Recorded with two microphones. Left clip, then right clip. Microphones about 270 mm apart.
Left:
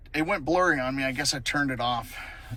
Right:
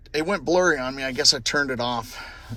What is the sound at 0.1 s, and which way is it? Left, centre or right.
Speech, centre.